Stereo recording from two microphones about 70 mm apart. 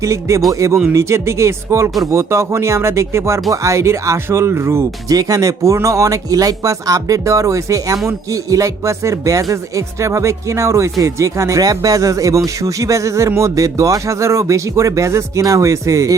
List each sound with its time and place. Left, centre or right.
0.0 s speech: right
5.0 s speech: right